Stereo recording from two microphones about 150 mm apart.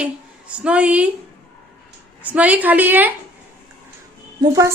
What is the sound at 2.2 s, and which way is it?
Speech, 10° right (ahead or behind).